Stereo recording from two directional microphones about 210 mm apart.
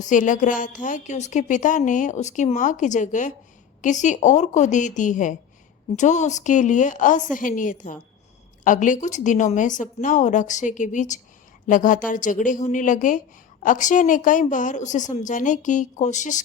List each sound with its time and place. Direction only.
0.0 s speech: 40° left (ahead or behind)